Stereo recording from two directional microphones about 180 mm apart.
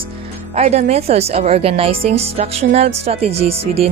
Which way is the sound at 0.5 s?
35° right (ahead or behind).